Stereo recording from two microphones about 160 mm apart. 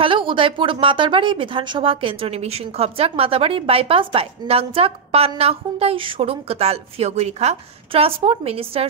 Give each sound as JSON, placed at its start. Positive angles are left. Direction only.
{"t": 0.0, "sound": "speech", "side_deg": -30}